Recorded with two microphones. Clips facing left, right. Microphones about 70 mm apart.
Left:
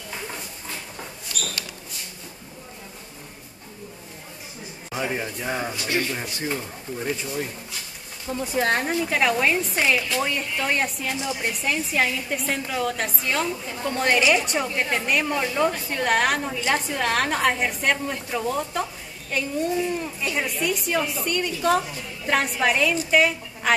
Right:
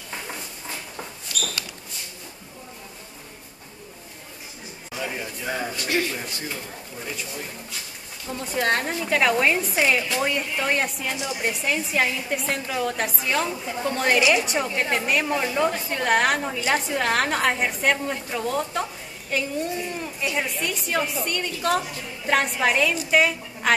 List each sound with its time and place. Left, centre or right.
4.9 s speech: left
5.9 s speech: centre
8.3 s a woman's voice: centre